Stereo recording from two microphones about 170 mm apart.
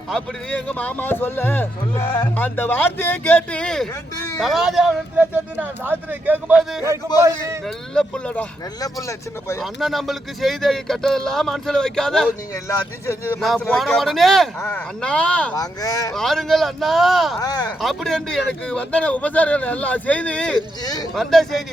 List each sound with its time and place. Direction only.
0.1 s a man's voice: 5° left (ahead or behind)
7.2 s speech: 15° right (ahead or behind)
7.6 s speech: 5° left (ahead or behind)
8.8 s speech: 20° left (ahead or behind)
9.6 s speech: centre (ahead or behind)
13.4 s speech: centre (ahead or behind)
15.5 s speech: 20° left (ahead or behind)
16.1 s speech: centre (ahead or behind)
17.4 s speech: 20° left (ahead or behind)
17.7 s a man's voice: centre (ahead or behind)
20.8 s speech: 25° left (ahead or behind)
21.2 s speech: centre (ahead or behind)